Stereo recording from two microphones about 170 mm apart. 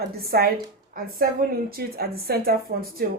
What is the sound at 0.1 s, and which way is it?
A woman's voice, 65° right (ahead or behind).